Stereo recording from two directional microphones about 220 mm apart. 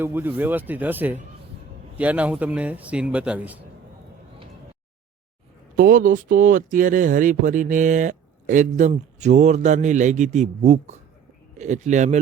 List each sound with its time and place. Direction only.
0.0 s speech: 10° right (ahead or behind)
5.7 s speech: 40° right (ahead or behind)